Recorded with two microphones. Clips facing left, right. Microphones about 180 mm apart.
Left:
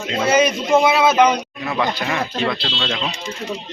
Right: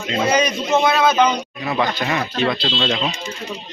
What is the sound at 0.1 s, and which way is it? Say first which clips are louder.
A man's voice: left 2 dB; 5° left (ahead or behind).